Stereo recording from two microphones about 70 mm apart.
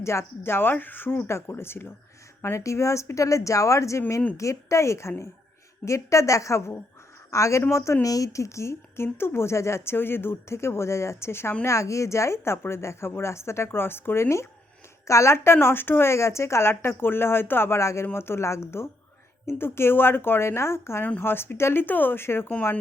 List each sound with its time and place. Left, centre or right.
0.0 s speech: left
8.0 s speech: left
15.5 s speech: left
21.0 s speech: left